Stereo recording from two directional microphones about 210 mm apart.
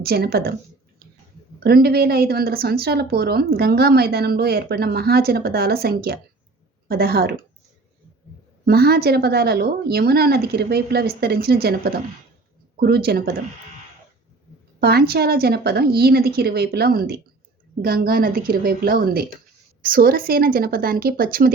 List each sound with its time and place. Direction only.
0.0 s a woman's voice: 45° right (ahead or behind)
1.6 s a woman's voice: 45° right (ahead or behind)
8.6 s a woman's voice: 45° right (ahead or behind)
14.8 s a woman's voice: 50° right (ahead or behind)